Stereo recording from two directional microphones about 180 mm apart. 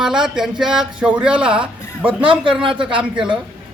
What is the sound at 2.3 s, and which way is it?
Speech, 30° right (ahead or behind).